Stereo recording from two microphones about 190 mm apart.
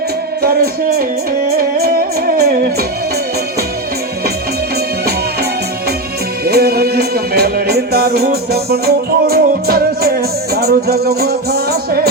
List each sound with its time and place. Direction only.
0.4 s speech: 55° right (ahead or behind)
1.5 s music: 55° right (ahead or behind)
6.4 s music: 55° right (ahead or behind)